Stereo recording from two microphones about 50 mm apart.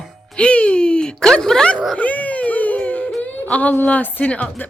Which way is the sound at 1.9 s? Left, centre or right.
Left.